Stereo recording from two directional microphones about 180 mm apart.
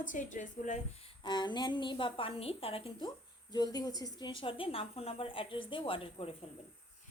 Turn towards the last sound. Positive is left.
turn(degrees=30)  # may be behind; listen again after turning